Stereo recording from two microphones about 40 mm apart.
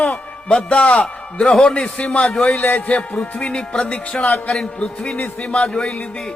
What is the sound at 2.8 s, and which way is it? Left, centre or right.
A man's voice, left.